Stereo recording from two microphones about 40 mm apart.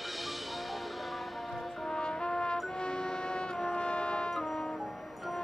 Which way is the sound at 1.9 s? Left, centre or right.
Centre.